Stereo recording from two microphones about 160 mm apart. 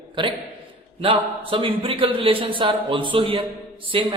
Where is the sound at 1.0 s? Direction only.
35° right (ahead or behind).